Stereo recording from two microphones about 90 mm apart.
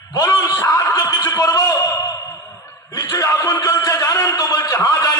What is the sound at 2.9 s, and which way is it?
A man's voice, 40° left (ahead or behind).